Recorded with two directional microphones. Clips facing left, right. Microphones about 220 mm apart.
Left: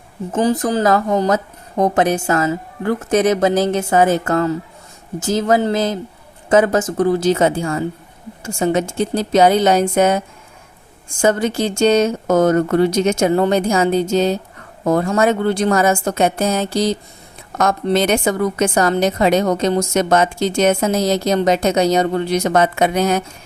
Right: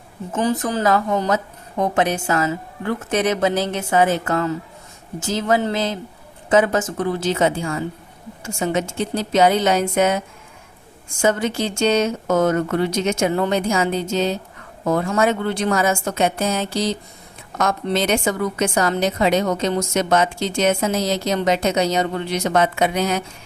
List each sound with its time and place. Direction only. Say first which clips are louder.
0.3 s a woman's voice: left 4 dB; 35° left (ahead or behind)